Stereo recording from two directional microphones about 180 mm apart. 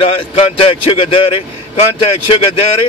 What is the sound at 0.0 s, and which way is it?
Speech, 30° left (ahead or behind).